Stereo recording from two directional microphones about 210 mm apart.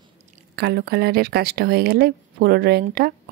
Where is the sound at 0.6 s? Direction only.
50° right (ahead or behind).